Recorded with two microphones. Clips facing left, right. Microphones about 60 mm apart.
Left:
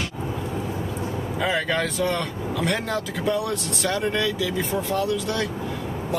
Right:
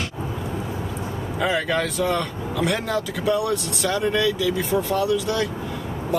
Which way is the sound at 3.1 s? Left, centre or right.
Centre.